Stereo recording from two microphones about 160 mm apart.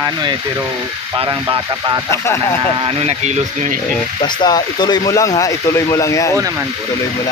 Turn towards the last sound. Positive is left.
turn(degrees=20)  # may be behind; listen again after turning